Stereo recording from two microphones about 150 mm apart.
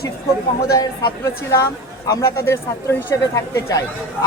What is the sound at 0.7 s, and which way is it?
A woman's voice, 25° left (ahead or behind).